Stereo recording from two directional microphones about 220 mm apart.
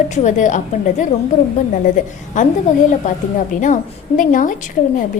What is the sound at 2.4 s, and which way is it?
A woman's voice, 35° left (ahead or behind).